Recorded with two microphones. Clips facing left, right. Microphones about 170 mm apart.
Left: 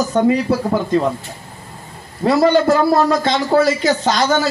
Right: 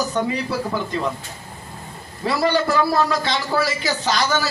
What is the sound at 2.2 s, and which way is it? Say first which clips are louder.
A man's voice: left 7 dB; 50° left (ahead or behind).